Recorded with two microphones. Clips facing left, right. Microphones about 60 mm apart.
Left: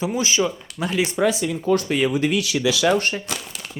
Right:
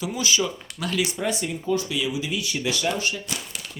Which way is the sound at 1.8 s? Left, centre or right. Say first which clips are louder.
Left 7 dB; left.